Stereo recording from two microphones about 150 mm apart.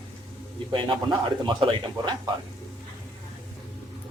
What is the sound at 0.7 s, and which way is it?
Speech, 35° right (ahead or behind).